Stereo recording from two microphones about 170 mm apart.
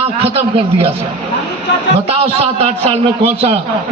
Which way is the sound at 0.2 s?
35° right (ahead or behind).